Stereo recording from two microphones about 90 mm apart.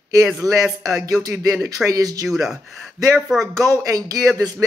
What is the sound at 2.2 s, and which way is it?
Speech, 5° right (ahead or behind).